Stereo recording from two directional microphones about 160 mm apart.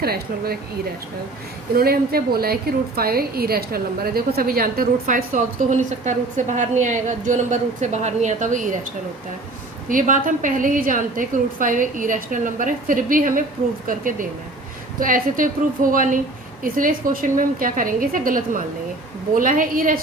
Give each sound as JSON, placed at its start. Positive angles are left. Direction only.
{"t": 0.0, "sound": "speech", "side_deg": -75}
{"t": 1.7, "sound": "a woman's voice", "side_deg": -70}
{"t": 9.9, "sound": "a woman's voice", "side_deg": -55}